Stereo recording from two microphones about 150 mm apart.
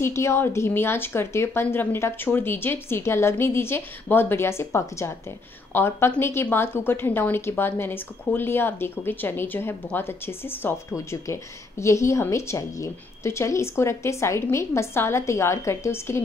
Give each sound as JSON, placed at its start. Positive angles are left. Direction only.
{"t": 0.0, "sound": "a woman's voice", "side_deg": 20}